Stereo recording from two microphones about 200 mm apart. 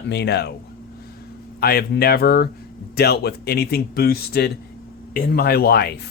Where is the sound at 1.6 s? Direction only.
50° left (ahead or behind).